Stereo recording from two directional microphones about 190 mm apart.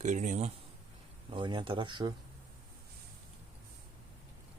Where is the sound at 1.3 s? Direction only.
25° right (ahead or behind).